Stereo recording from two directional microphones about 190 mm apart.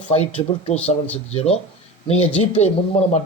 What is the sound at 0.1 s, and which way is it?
A man's voice, 35° left (ahead or behind).